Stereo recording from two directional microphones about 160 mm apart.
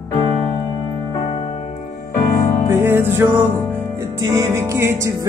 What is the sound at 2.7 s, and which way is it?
Music, 15° right (ahead or behind).